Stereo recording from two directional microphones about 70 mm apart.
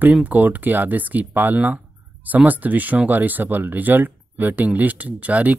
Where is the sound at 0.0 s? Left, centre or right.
Right.